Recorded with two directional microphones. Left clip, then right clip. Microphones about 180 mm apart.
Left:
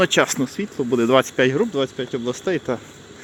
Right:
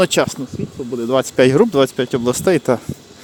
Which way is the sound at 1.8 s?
60° right (ahead or behind).